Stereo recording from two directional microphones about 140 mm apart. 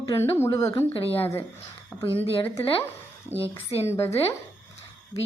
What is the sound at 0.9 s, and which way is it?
Speech, 45° left (ahead or behind).